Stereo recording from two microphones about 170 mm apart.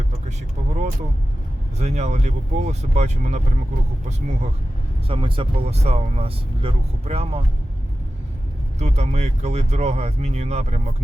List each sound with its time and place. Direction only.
1.8 s speech: 40° right (ahead or behind)
5.0 s speech: 30° right (ahead or behind)
8.8 s speech: 40° right (ahead or behind)